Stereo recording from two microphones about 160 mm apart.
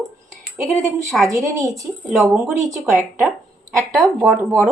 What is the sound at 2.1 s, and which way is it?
Speech, centre (ahead or behind).